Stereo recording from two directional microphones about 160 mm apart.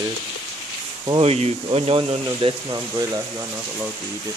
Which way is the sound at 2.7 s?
20° right (ahead or behind).